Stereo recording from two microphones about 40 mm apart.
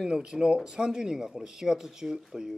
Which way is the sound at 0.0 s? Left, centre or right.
Right.